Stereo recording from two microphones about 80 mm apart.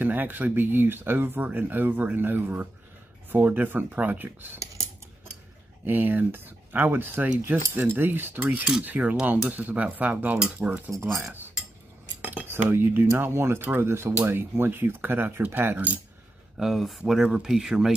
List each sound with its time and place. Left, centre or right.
0.0 s speech: right
5.9 s speech: right
10.9 s speech: right
12.3 s speech: right
16.5 s speech: centre